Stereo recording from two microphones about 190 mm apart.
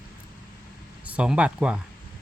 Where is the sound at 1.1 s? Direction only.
5° right (ahead or behind).